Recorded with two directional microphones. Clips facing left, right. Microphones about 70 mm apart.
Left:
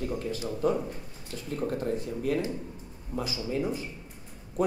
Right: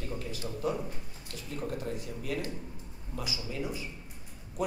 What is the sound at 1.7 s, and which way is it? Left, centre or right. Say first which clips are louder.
Speech: left 6 dB; left.